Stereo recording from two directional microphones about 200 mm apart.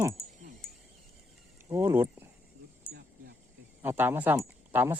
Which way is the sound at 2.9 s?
55° right (ahead or behind).